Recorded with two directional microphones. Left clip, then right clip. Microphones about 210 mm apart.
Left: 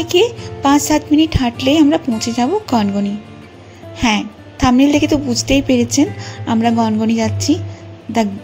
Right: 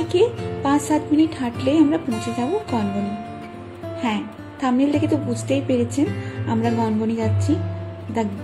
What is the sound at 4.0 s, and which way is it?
A woman's voice, 45° left (ahead or behind).